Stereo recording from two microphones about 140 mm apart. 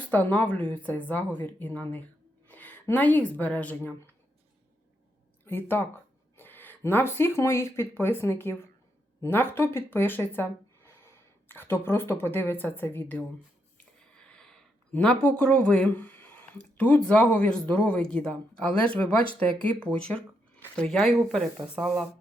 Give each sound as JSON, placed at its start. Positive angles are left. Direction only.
{"t": 0.1, "sound": "speech", "side_deg": 10}
{"t": 5.5, "sound": "speech", "side_deg": 15}